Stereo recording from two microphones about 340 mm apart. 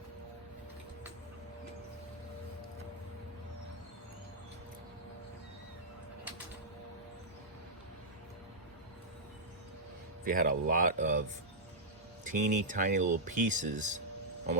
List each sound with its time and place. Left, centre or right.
10.2 s speech: right
12.2 s speech: right